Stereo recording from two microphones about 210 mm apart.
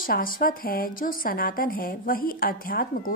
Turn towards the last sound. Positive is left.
turn(degrees=45)  # may be behind; listen again after turning